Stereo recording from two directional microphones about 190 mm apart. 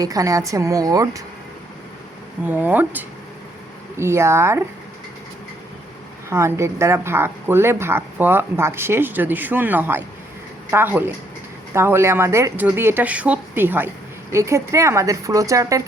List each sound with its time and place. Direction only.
0.0 s speech: 15° right (ahead or behind)
2.5 s speech: 10° right (ahead or behind)
6.3 s speech: 15° right (ahead or behind)